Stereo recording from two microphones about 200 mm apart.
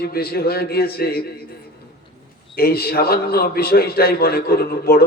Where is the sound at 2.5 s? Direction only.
50° left (ahead or behind).